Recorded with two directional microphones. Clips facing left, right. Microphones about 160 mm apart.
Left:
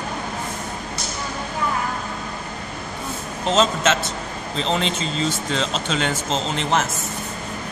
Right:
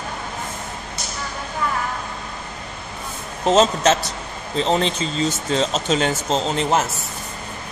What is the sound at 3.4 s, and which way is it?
Speech, 40° right (ahead or behind).